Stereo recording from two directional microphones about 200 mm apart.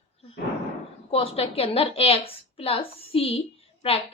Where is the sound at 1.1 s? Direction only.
30° left (ahead or behind).